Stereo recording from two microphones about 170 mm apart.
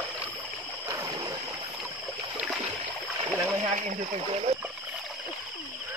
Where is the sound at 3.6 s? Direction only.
45° right (ahead or behind).